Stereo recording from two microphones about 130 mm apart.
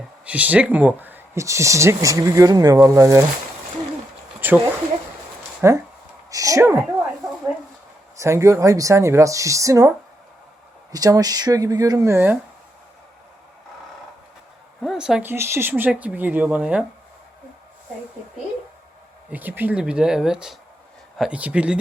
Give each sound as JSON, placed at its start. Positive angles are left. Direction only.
{"t": 0.3, "sound": "speech", "side_deg": -10}
{"t": 4.4, "sound": "a sound", "side_deg": -15}
{"t": 5.6, "sound": "speech", "side_deg": -20}
{"t": 8.1, "sound": "speech", "side_deg": -25}
{"t": 10.9, "sound": "speech", "side_deg": -30}
{"t": 14.8, "sound": "speech", "side_deg": -5}
{"t": 19.3, "sound": "speech", "side_deg": -15}